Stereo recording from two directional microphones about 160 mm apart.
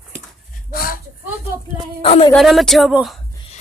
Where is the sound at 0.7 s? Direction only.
65° left (ahead or behind).